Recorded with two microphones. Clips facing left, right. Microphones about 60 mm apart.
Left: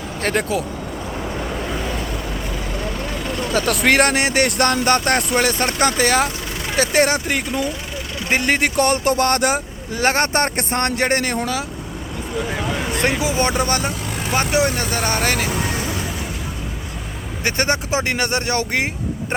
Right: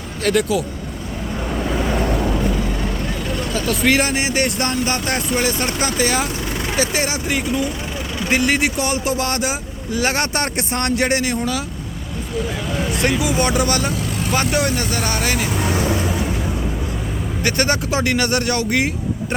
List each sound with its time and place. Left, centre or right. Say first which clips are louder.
0.2 s speech: right 3 dB; left
3.5 s speech: left 1 dB; left
12.7 s speech: right 2 dB; left
14.8 s speech: left 1 dB; left
17.4 s speech: right 1 dB; left